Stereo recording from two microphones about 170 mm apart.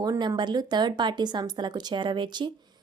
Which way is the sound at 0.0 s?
25° right (ahead or behind).